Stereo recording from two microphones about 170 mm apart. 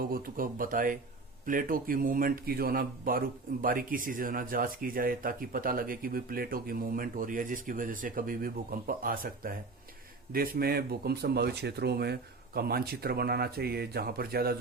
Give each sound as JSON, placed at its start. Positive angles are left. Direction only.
{"t": 0.0, "sound": "speech", "side_deg": -60}